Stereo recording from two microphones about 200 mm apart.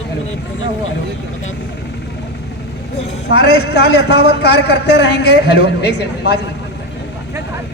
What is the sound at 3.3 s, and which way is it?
Speech, 55° left (ahead or behind).